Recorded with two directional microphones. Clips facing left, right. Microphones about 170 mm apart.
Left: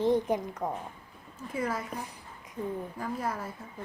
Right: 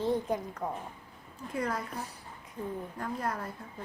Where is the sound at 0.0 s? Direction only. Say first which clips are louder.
Left 4 dB; 20° left (ahead or behind).